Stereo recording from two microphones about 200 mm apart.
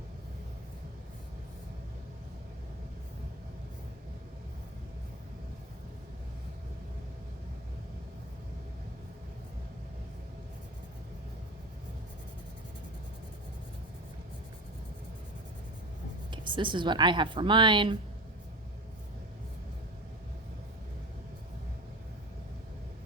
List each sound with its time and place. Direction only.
16.3 s a woman's voice: 25° right (ahead or behind)